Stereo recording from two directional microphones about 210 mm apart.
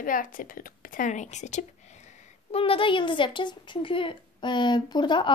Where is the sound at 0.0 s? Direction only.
40° left (ahead or behind).